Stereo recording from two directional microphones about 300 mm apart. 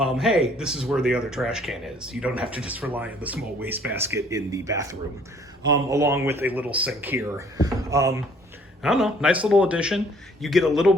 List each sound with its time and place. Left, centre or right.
0.0 s speech: centre